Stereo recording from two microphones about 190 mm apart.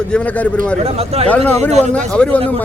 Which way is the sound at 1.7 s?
35° right (ahead or behind).